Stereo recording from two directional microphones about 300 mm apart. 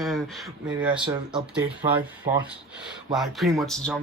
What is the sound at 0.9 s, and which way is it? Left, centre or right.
Speech, centre.